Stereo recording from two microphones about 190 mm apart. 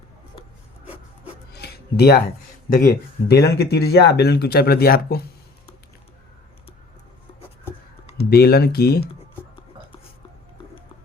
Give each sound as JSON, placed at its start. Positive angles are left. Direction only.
{"t": 1.5, "sound": "a sound", "side_deg": 55}
{"t": 2.6, "sound": "speech", "side_deg": 50}
{"t": 8.3, "sound": "speech", "side_deg": 55}